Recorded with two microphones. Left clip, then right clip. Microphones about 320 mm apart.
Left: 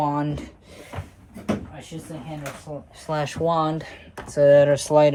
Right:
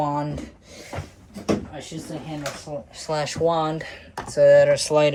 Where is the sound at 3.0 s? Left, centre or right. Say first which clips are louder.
Right 1 dB; left.